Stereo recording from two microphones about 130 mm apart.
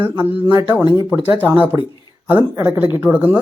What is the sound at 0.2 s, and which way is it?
A man's voice, 15° right (ahead or behind).